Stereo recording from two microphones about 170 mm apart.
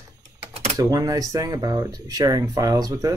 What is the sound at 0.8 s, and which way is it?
Speech, 20° right (ahead or behind).